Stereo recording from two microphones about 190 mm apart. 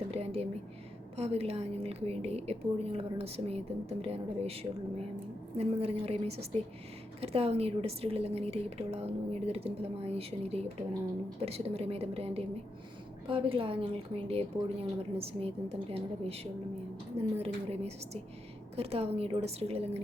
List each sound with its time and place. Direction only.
0.1 s whispering: 30° right (ahead or behind)
1.1 s speech: 30° right (ahead or behind)
5.5 s speech: 30° right (ahead or behind)